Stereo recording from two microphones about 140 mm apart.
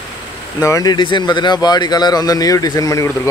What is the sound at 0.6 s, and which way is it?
Speech, 25° left (ahead or behind).